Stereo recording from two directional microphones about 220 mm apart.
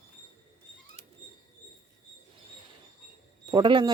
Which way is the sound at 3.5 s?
20° right (ahead or behind).